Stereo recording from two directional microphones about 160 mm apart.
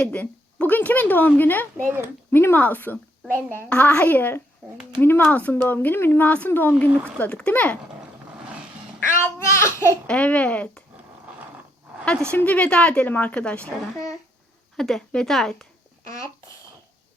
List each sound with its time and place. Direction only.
0.0 s a sound: 10° left (ahead or behind)
1.7 s speech: 15° right (ahead or behind)
2.3 s speech: 15° left (ahead or behind)
9.2 s speech: 15° left (ahead or behind)
12.3 s speech: 10° left (ahead or behind)
14.8 s a woman's voice: centre (ahead or behind)
16.0 s a child's voice: 20° left (ahead or behind)